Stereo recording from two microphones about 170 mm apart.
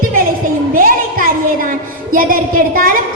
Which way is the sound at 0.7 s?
55° right (ahead or behind).